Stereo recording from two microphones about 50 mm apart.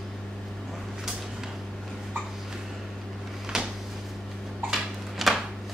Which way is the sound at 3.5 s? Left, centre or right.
Centre.